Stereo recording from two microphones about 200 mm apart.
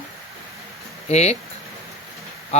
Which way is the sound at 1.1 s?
35° left (ahead or behind).